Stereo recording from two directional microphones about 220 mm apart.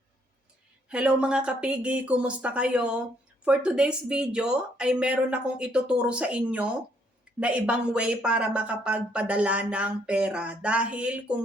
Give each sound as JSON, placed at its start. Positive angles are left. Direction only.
{"t": 0.9, "sound": "speech", "side_deg": -5}